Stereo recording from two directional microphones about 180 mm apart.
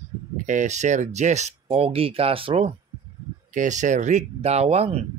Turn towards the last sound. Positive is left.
turn(degrees=-35)  # may be behind; listen again after turning